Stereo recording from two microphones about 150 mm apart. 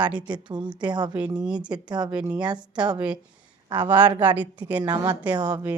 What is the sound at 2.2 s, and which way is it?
Speech, 25° right (ahead or behind).